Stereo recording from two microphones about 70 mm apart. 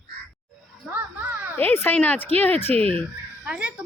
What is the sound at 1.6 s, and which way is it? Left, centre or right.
Speech, left.